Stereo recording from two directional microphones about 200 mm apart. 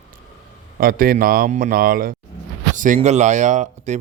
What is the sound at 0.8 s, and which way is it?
Speech, 45° right (ahead or behind).